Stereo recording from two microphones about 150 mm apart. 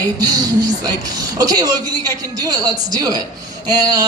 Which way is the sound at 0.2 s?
25° right (ahead or behind).